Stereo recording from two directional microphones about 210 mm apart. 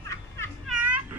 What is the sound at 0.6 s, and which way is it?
Children playing, 5° right (ahead or behind).